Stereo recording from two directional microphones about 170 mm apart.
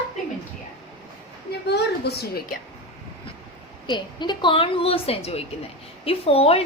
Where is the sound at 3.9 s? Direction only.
25° left (ahead or behind).